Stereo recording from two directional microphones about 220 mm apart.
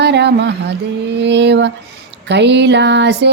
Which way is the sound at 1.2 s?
50° right (ahead or behind).